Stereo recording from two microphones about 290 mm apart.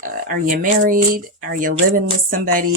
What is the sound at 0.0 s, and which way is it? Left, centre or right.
Speech, right.